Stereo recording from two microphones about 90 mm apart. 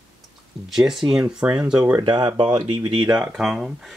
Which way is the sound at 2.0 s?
60° right (ahead or behind).